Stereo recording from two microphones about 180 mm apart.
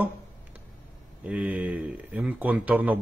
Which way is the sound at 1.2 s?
10° right (ahead or behind).